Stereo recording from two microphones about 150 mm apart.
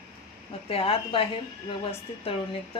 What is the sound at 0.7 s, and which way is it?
Speech, 40° left (ahead or behind).